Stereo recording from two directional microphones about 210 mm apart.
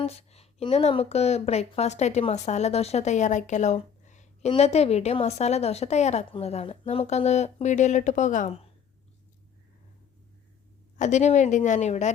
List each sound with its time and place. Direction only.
0.0 s speech: 30° left (ahead or behind)
10.9 s speech: 35° left (ahead or behind)